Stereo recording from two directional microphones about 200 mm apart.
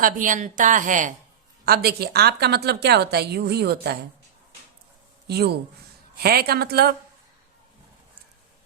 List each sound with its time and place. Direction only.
0.0 s a woman's voice: 40° right (ahead or behind)
1.6 s a woman's voice: 50° right (ahead or behind)
5.3 s a woman's voice: 55° right (ahead or behind)